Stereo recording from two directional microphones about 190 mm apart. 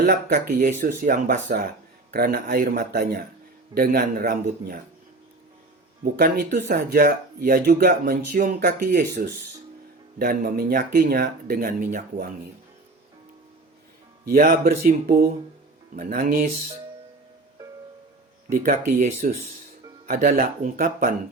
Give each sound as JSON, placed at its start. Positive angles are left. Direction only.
{"t": 0.0, "sound": "speech", "side_deg": -55}
{"t": 1.0, "sound": "speech", "side_deg": -40}
{"t": 2.1, "sound": "speech", "side_deg": -50}
{"t": 6.1, "sound": "speech", "side_deg": -50}
{"t": 14.6, "sound": "speech", "side_deg": -50}
{"t": 18.4, "sound": "speech", "side_deg": -50}